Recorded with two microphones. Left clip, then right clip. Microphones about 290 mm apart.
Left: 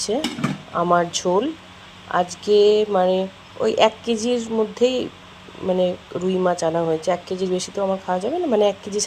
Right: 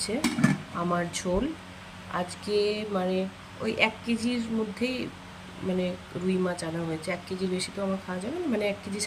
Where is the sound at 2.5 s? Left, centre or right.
Left.